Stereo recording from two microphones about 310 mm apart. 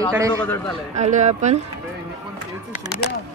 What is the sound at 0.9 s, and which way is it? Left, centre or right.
Speech, right.